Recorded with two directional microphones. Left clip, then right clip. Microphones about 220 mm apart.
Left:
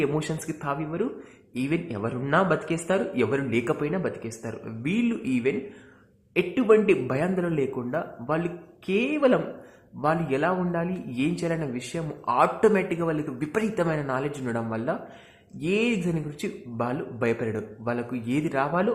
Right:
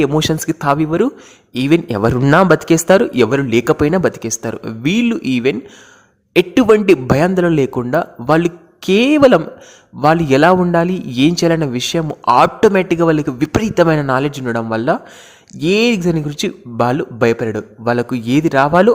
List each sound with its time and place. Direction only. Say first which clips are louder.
0.0 s a man's voice: right 12 dB; 45° right (ahead or behind)